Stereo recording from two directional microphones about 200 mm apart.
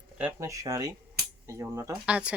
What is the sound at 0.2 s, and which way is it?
A woman's voice, 10° right (ahead or behind).